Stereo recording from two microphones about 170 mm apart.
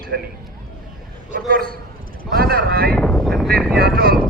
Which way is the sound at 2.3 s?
60° right (ahead or behind).